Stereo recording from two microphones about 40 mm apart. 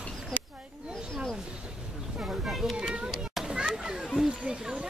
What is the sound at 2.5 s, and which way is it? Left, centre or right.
Speech, centre.